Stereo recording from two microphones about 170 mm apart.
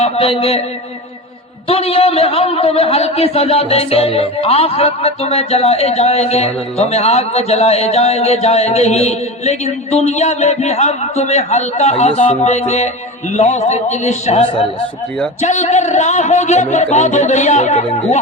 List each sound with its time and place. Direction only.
0.0 s a man's voice: 35° left (ahead or behind)
1.6 s a man's voice: 35° left (ahead or behind)